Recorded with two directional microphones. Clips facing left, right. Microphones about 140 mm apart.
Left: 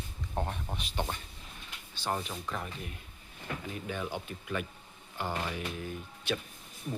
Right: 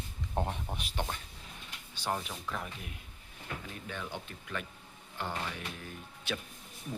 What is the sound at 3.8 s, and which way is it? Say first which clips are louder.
Speech: left 4 dB; 10° left (ahead or behind).